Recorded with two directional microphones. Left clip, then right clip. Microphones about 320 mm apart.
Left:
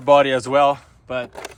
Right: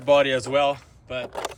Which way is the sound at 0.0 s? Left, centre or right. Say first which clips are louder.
Left 4 dB; centre.